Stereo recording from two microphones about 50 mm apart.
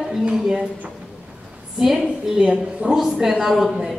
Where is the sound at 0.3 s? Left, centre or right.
Centre.